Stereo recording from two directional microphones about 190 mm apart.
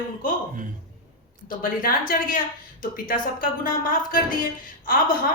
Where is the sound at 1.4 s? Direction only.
50° left (ahead or behind).